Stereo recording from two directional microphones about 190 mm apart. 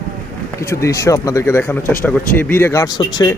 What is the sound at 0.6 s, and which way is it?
Speech, 15° left (ahead or behind).